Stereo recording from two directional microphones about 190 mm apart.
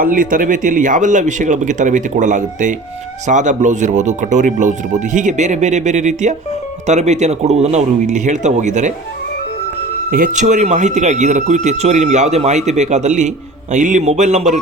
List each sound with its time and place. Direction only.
0.0 s speech: 45° right (ahead or behind)
10.1 s speech: 45° right (ahead or behind)